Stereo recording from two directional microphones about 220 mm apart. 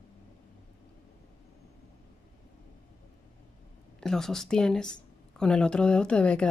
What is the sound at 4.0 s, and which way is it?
Speech, centre (ahead or behind).